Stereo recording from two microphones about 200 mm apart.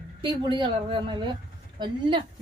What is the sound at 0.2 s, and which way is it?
Speech, 25° right (ahead or behind).